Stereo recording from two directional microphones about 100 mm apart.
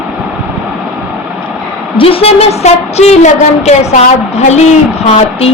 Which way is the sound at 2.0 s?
70° left (ahead or behind).